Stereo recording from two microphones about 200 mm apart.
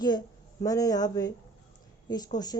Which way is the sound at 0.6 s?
15° left (ahead or behind).